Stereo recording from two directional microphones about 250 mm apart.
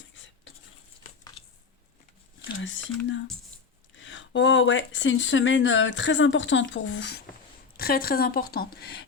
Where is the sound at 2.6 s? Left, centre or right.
Left.